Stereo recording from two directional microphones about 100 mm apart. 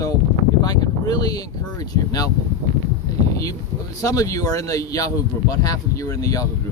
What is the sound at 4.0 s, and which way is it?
Speech, 35° left (ahead or behind).